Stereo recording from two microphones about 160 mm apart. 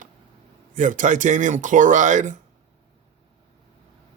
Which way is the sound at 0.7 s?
55° right (ahead or behind).